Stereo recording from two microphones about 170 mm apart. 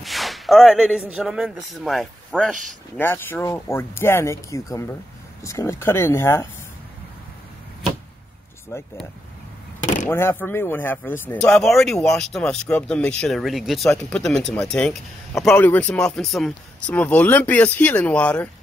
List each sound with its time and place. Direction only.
0.0 s speech: centre (ahead or behind)
8.7 s speech: 15° left (ahead or behind)
10.0 s speech: 15° left (ahead or behind)